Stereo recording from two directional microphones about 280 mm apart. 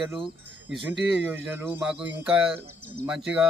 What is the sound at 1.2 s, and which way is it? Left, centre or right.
Speech, centre.